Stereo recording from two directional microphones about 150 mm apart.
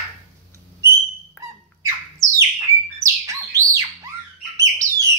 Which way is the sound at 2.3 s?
20° right (ahead or behind).